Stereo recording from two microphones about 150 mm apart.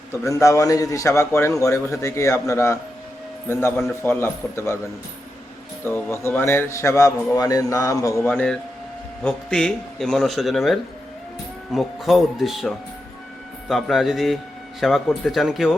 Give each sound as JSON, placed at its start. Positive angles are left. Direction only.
{"t": 0.1, "sound": "a man's voice", "side_deg": 20}
{"t": 5.8, "sound": "a man's voice", "side_deg": 15}
{"t": 8.3, "sound": "a man's voice", "side_deg": 10}